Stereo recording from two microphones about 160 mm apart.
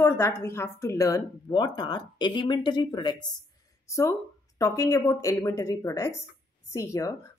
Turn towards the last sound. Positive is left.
turn(degrees=20)  # may be behind; listen again after turning